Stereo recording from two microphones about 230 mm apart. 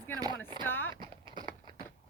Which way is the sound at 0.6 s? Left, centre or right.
Centre.